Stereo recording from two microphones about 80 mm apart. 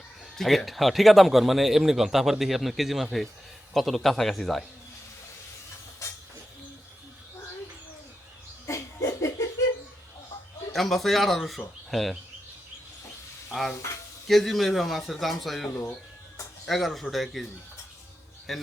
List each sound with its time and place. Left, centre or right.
0.3 s speech: centre
8.6 s a sound: left
10.8 s speech: centre
13.5 s stir: centre
13.7 s speech: left
14.3 s speech: centre
18.5 s speech: centre